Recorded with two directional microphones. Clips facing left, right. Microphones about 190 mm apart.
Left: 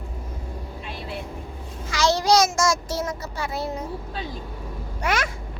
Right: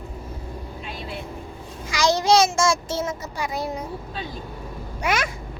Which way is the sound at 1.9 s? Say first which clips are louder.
Right 1 dB; 15° right (ahead or behind).